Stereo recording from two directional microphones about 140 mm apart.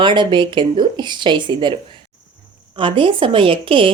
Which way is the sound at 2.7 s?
35° right (ahead or behind).